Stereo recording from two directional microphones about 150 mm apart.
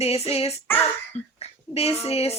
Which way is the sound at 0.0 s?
40° left (ahead or behind).